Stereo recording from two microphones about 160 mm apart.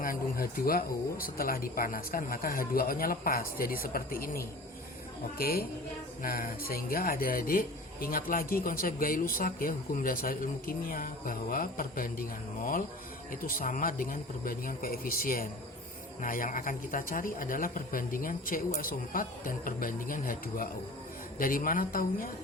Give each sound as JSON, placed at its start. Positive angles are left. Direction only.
{"t": 0.0, "sound": "a woman's voice", "side_deg": 65}
{"t": 13.3, "sound": "speech", "side_deg": 60}